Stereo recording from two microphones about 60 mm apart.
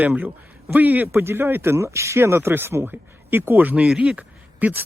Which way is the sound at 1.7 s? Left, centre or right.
Right.